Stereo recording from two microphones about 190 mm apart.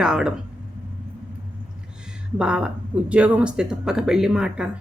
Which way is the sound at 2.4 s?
5° right (ahead or behind).